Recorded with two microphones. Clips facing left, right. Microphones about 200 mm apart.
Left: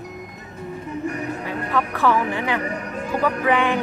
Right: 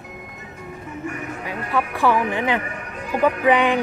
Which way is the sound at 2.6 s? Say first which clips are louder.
Left 4 dB; 40° left (ahead or behind).